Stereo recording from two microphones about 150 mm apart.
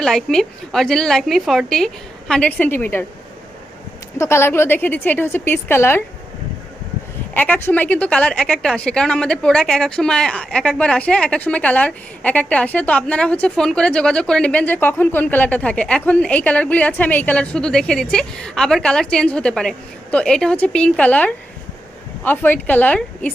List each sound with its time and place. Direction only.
0.0 s a woman's voice: 5° left (ahead or behind)
4.2 s a woman's voice: 15° left (ahead or behind)
7.3 s a woman's voice: 10° left (ahead or behind)